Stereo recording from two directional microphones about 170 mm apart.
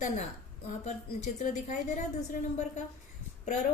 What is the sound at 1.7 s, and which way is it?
A woman's voice, 45° left (ahead or behind).